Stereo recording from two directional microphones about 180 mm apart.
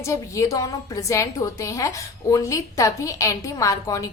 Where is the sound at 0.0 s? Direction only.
15° left (ahead or behind).